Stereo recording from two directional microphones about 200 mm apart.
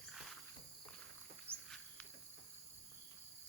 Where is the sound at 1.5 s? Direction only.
10° right (ahead or behind).